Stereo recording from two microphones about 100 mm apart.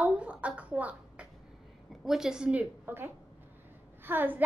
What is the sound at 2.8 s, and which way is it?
A woman's voice, 20° right (ahead or behind).